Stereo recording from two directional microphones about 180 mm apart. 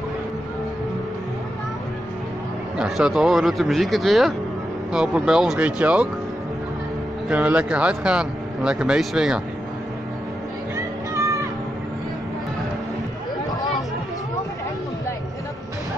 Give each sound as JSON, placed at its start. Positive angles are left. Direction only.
{"t": 2.8, "sound": "speech", "side_deg": -5}
{"t": 7.2, "sound": "speech", "side_deg": -10}
{"t": 11.1, "sound": "music", "side_deg": -15}